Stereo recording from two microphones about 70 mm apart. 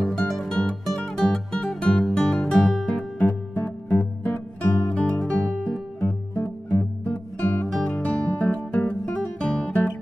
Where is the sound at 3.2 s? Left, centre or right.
Left.